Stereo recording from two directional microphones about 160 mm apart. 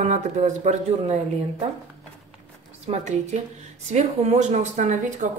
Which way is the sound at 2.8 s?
45° right (ahead or behind).